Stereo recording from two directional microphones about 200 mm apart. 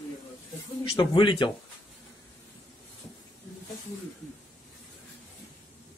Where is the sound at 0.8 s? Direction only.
25° left (ahead or behind).